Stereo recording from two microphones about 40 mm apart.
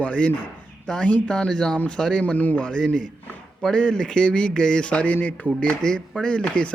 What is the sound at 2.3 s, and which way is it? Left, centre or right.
Speech, left.